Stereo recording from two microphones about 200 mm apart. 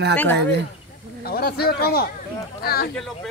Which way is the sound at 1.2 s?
50° left (ahead or behind).